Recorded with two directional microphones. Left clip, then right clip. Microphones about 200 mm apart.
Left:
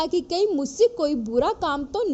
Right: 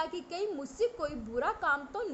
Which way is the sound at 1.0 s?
45° left (ahead or behind).